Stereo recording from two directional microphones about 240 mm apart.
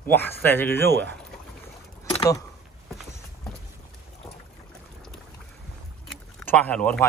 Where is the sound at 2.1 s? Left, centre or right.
Centre.